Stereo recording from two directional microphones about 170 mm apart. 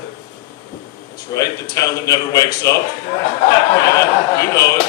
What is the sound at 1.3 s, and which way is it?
A man's voice, 20° left (ahead or behind).